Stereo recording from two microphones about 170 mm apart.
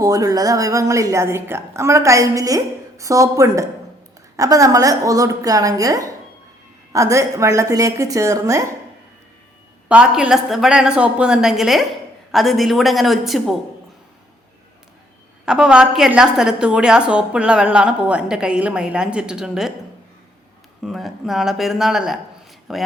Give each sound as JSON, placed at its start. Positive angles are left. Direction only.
{"t": 0.0, "sound": "a woman's voice", "side_deg": -20}
{"t": 9.9, "sound": "a woman's voice", "side_deg": -5}
{"t": 15.4, "sound": "a woman's voice", "side_deg": -5}
{"t": 20.8, "sound": "a woman's voice", "side_deg": 0}